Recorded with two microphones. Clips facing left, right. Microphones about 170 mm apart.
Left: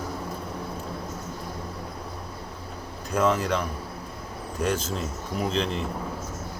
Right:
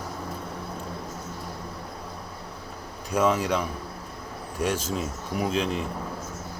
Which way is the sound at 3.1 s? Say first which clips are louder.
Even; 5° right (ahead or behind).